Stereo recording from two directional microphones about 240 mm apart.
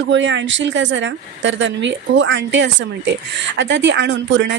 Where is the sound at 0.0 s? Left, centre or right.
Right.